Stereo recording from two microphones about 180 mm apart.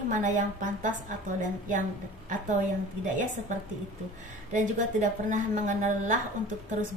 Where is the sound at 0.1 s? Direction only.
45° right (ahead or behind).